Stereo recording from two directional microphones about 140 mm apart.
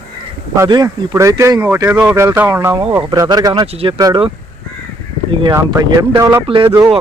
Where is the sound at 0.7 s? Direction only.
25° right (ahead or behind).